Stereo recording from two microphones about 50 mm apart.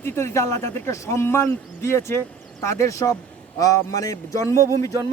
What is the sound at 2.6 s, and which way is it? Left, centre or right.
A man's voice, left.